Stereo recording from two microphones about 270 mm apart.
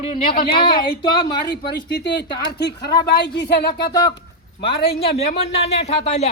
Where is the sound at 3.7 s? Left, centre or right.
Centre.